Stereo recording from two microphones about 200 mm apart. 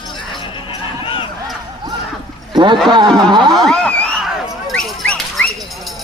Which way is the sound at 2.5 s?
20° right (ahead or behind).